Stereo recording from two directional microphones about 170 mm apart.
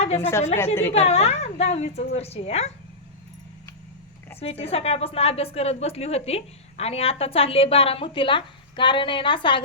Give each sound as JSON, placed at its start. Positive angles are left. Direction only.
{"t": 0.2, "sound": "a woman's voice", "side_deg": 15}
{"t": 0.9, "sound": "a woman's voice", "side_deg": 40}
{"t": 4.4, "sound": "a woman's voice", "side_deg": 35}